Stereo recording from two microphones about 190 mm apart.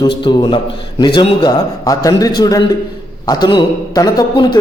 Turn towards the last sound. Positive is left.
turn(degrees=20)  # may be behind; listen again after turning